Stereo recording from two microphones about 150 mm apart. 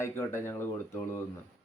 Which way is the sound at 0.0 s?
15° left (ahead or behind).